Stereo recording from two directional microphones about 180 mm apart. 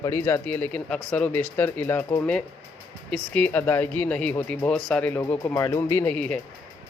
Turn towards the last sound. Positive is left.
turn(degrees=5)  # may be behind; listen again after turning